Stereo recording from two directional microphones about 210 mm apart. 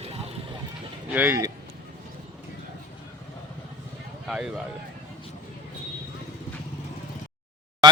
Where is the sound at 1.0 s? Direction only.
10° right (ahead or behind).